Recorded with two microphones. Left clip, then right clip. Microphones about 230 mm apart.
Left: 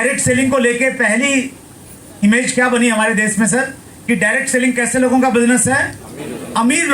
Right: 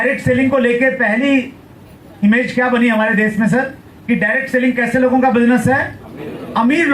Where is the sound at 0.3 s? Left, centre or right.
Left.